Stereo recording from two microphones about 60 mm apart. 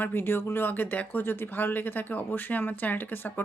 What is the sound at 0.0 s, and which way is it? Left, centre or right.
Speech, left.